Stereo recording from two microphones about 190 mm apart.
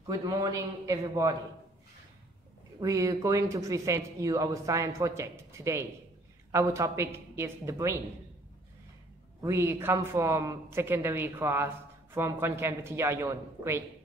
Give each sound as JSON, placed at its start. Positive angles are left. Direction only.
{"t": 0.0, "sound": "a man's voice", "side_deg": -20}
{"t": 2.8, "sound": "a man's voice", "side_deg": -15}
{"t": 9.4, "sound": "a man's voice", "side_deg": -15}